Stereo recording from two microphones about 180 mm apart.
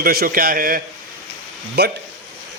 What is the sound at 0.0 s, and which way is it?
Speech, 55° right (ahead or behind).